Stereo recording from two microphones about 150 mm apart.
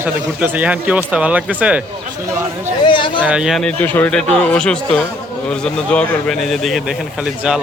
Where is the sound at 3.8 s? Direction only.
10° left (ahead or behind).